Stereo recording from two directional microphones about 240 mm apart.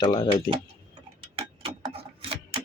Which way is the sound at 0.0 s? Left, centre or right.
Centre.